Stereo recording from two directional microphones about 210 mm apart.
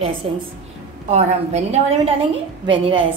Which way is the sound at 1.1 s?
30° right (ahead or behind).